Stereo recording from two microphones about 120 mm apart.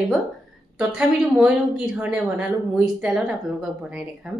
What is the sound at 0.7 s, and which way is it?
A woman's voice, 5° right (ahead or behind).